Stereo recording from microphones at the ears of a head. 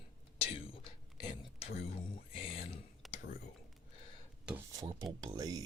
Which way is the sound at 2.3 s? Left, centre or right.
Left.